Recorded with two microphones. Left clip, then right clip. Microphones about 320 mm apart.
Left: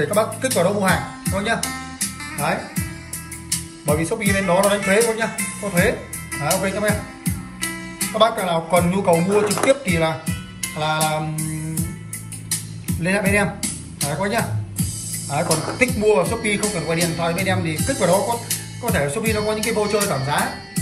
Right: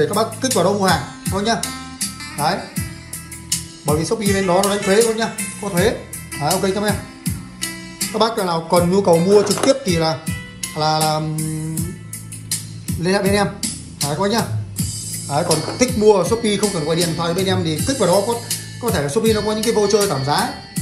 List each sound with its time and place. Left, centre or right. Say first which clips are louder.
0.0 s speech: right 1 dB; centre